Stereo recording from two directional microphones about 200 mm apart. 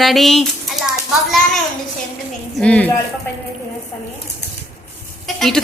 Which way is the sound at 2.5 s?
5° left (ahead or behind).